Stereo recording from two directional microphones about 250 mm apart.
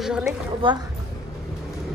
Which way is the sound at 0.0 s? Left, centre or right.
Centre.